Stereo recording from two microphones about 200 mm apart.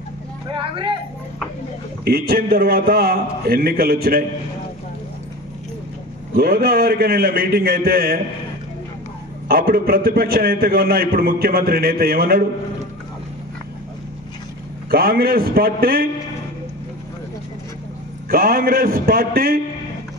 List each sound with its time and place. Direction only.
0.5 s speech: 25° right (ahead or behind)
2.0 s a man's voice: 50° right (ahead or behind)
6.3 s a man's voice: 50° right (ahead or behind)
9.5 s a man's voice: 50° right (ahead or behind)
14.9 s a man's voice: 50° right (ahead or behind)
18.3 s a man's voice: 45° right (ahead or behind)